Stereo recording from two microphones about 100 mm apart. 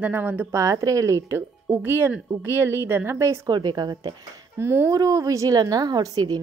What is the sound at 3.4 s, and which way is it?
Speech, 45° right (ahead or behind).